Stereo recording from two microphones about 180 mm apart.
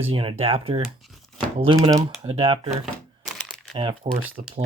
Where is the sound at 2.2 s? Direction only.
30° right (ahead or behind).